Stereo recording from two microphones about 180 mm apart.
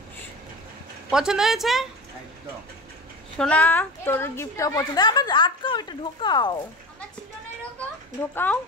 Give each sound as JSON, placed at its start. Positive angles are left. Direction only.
{"t": 1.1, "sound": "speech", "side_deg": -5}
{"t": 3.3, "sound": "a woman's voice", "side_deg": 10}
{"t": 7.8, "sound": "a child's voice", "side_deg": 10}